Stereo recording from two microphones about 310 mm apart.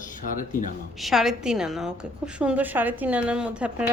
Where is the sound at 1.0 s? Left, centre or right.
Centre.